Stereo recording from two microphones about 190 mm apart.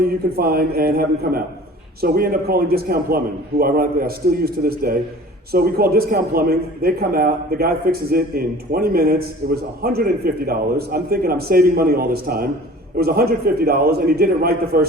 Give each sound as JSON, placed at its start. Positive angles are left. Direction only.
{"t": 0.0, "sound": "a man's voice", "side_deg": -55}